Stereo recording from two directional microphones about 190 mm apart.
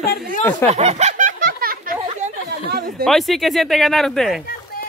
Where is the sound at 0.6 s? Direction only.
35° right (ahead or behind); by 3.0 s 55° right (ahead or behind).